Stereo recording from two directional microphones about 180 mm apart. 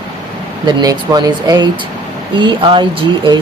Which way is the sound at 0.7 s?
20° right (ahead or behind).